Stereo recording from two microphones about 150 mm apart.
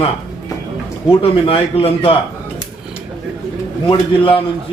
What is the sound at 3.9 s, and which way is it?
Speech, 35° left (ahead or behind).